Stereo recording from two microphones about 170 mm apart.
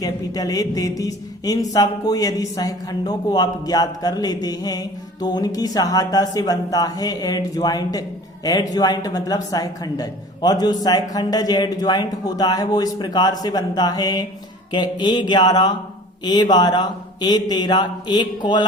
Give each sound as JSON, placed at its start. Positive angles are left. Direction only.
{"t": 0.0, "sound": "a man's voice", "side_deg": 20}